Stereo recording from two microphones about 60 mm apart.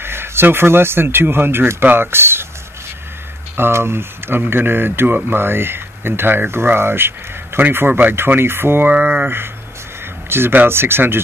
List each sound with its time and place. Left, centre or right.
0.0 s speech: right
3.5 s speech: right
8.9 s speech: right